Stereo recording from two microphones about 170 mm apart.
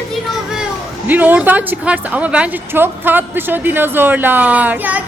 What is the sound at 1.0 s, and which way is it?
Speech, 10° right (ahead or behind).